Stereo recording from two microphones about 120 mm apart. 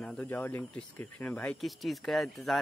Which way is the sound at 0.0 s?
10° left (ahead or behind).